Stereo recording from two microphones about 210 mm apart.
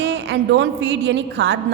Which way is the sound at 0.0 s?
55° right (ahead or behind).